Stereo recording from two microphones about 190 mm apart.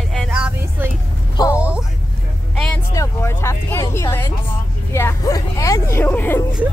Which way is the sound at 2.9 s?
15° left (ahead or behind).